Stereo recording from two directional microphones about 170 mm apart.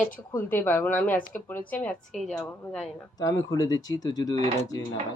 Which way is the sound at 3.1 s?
20° left (ahead or behind).